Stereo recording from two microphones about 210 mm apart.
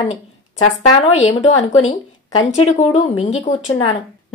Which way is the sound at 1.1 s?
30° left (ahead or behind).